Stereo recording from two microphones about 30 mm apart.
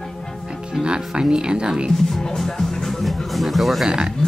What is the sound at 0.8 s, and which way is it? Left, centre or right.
Speech, right.